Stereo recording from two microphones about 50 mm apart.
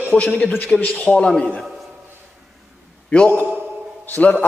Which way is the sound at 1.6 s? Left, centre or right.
Centre.